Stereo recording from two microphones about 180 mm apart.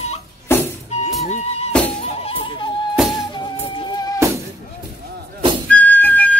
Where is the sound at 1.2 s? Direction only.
35° left (ahead or behind).